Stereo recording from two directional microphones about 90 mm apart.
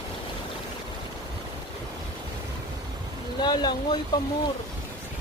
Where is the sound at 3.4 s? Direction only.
55° left (ahead or behind).